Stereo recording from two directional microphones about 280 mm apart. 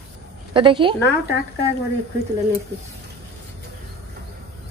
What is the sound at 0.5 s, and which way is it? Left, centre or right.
Speech, centre.